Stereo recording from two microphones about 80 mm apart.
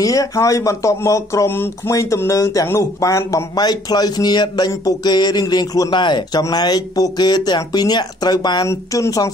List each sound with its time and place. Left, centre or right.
0.0 s speech: left
3.5 s speech: left
6.4 s speech: left
8.6 s speech: left